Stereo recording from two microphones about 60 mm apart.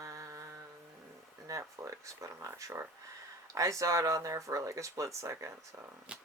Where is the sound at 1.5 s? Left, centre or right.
Right.